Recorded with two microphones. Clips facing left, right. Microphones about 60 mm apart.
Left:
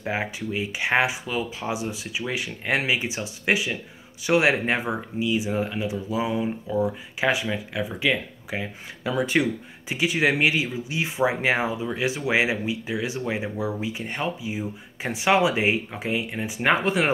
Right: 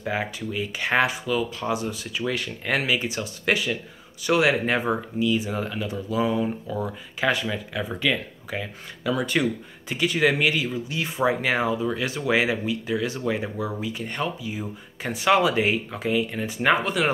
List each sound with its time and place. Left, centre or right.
0.0 s speech: left
4.3 s speech: left
16.8 s speech: left